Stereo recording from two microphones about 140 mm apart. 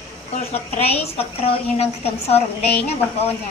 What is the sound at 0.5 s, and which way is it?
A woman's voice, 45° left (ahead or behind).